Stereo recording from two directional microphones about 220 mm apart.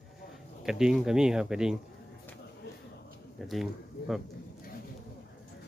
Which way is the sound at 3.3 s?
Centre (ahead or behind).